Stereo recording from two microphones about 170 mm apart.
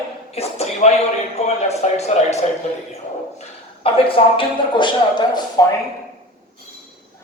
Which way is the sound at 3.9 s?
30° left (ahead or behind).